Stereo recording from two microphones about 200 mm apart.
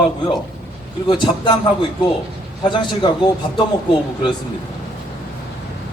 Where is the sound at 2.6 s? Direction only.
25° left (ahead or behind).